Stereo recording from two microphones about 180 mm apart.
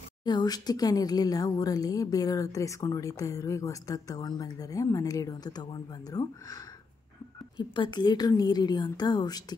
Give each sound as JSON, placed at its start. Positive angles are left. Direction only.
{"t": 0.2, "sound": "speech", "side_deg": 25}